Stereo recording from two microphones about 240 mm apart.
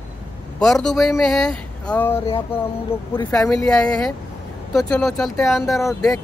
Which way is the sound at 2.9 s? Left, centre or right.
Centre.